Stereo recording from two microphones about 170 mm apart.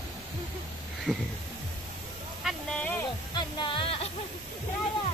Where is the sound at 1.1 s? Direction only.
5° right (ahead or behind).